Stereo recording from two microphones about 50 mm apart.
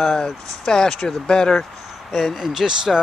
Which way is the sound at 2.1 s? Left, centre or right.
Centre.